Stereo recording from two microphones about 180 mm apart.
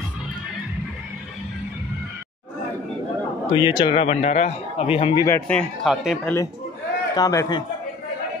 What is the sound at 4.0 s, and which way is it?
A man's voice, 40° left (ahead or behind).